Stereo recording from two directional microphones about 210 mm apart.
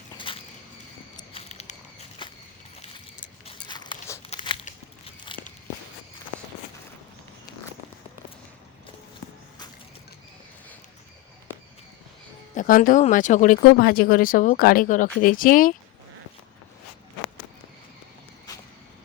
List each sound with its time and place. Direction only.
0.2 s a sound: 25° left (ahead or behind)
3.4 s biting: 20° left (ahead or behind)
4.3 s crumpling: 30° left (ahead or behind)
12.5 s speech: 40° left (ahead or behind)